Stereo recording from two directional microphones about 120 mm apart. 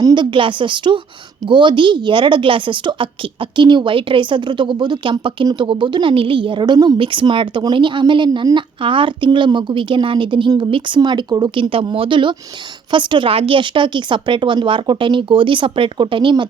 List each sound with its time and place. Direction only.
0.0 s a woman's voice: 40° right (ahead or behind)
11.7 s speech: 50° right (ahead or behind)